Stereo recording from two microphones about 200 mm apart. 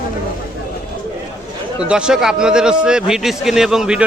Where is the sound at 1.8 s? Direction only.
5° right (ahead or behind).